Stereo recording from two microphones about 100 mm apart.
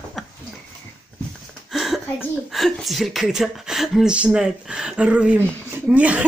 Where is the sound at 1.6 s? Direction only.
Centre (ahead or behind).